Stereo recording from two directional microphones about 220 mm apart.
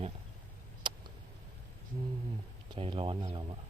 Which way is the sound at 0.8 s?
20° right (ahead or behind).